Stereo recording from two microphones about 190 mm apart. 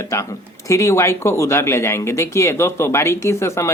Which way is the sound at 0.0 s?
15° left (ahead or behind).